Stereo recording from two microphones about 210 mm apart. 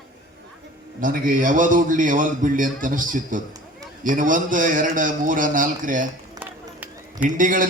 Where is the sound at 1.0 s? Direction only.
40° right (ahead or behind).